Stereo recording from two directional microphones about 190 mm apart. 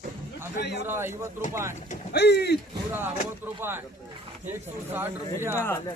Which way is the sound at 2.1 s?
60° left (ahead or behind).